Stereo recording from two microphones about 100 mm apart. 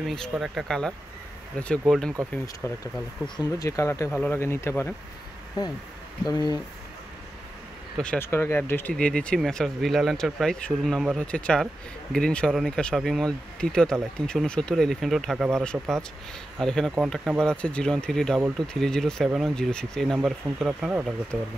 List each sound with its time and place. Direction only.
0.0 s speech: 5° left (ahead or behind)
0.3 s speech: 5° right (ahead or behind)
1.6 s speech: 10° left (ahead or behind)
2.6 s speech: 25° left (ahead or behind)
3.3 s speech: 40° left (ahead or behind)
4.1 s speech: 20° left (ahead or behind)
6.2 s speech: 45° left (ahead or behind)
8.2 s speech: 25° left (ahead or behind); by 21.5 s centre (ahead or behind)